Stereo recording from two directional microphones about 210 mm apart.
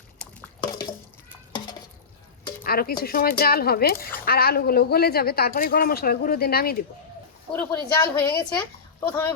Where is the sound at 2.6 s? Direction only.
45° left (ahead or behind).